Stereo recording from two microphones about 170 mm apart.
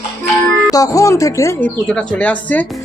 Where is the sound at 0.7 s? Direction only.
20° left (ahead or behind).